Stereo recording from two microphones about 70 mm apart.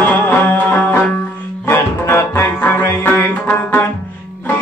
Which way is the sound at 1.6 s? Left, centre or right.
Left.